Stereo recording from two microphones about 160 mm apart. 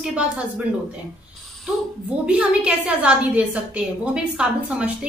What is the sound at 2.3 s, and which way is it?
A woman's voice, 5° right (ahead or behind).